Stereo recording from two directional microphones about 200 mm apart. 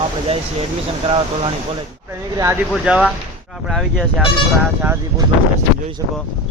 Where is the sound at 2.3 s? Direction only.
15° right (ahead or behind).